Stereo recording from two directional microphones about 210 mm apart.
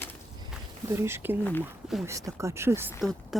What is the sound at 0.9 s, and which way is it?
Speech, 10° right (ahead or behind).